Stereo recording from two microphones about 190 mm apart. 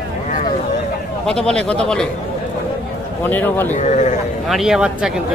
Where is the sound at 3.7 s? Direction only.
40° left (ahead or behind).